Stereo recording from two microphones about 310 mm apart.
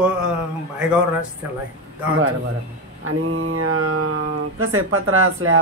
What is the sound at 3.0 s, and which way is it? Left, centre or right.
Mantra, right.